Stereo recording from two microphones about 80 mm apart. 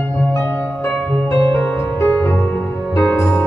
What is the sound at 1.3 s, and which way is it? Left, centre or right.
Music, left.